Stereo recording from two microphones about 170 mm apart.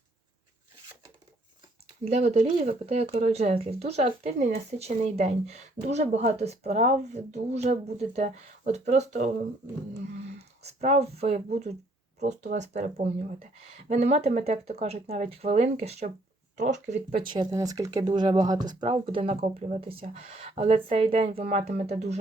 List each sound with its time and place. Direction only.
2.1 s speech: 40° right (ahead or behind)
10.6 s speech: 40° right (ahead or behind)
17.2 s speech: 25° right (ahead or behind)